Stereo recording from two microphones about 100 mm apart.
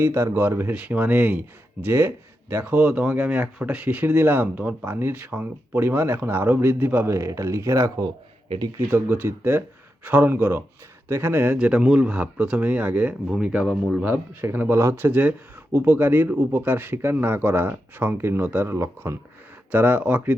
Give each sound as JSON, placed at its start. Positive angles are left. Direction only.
{"t": 0.0, "sound": "speech", "side_deg": -30}
{"t": 8.9, "sound": "speech", "side_deg": -20}
{"t": 11.5, "sound": "speech", "side_deg": -10}
{"t": 13.2, "sound": "speech", "side_deg": -5}
{"t": 14.0, "sound": "speech", "side_deg": -20}